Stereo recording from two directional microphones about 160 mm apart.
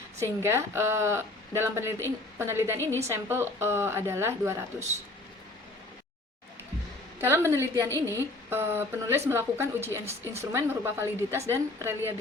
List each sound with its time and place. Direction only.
0.2 s a woman's voice: 15° right (ahead or behind)
7.2 s a woman's voice: 15° right (ahead or behind)
7.9 s a woman's voice: 15° left (ahead or behind)
8.4 s a woman's voice: 15° right (ahead or behind)